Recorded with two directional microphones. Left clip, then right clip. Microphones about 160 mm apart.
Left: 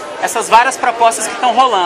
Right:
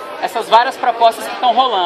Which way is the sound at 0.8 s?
20° right (ahead or behind).